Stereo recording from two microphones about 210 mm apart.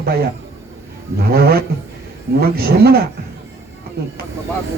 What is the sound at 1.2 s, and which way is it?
A man's voice, 45° right (ahead or behind).